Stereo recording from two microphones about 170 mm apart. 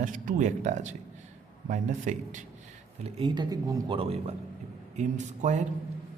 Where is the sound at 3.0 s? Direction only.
30° right (ahead or behind).